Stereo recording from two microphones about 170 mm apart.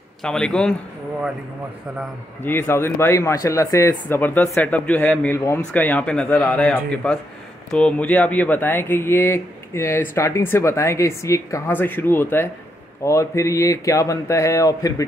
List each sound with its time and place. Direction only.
0.2 s a man's voice: 5° left (ahead or behind)
2.4 s a man's voice: 15° left (ahead or behind)